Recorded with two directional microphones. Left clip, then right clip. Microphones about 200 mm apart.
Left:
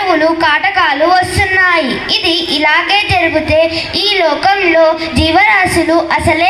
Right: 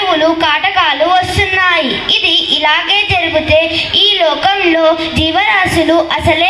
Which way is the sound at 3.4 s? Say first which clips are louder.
Right 1 dB; 60° right (ahead or behind).